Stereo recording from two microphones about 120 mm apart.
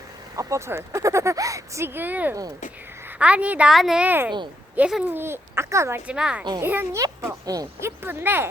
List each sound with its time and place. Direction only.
0.3 s a woman's voice: 25° right (ahead or behind)
4.8 s speech: 5° right (ahead or behind)
5.0 s speech: 20° right (ahead or behind)
6.1 s a woman's voice: 10° right (ahead or behind)
7.4 s speech: 30° right (ahead or behind)